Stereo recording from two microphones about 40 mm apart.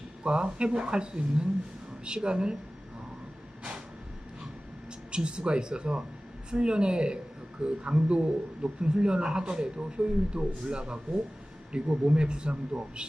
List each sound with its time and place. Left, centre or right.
0.3 s a man's voice: right
5.1 s a man's voice: right